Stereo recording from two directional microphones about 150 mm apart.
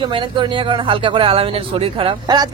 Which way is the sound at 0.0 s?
35° right (ahead or behind).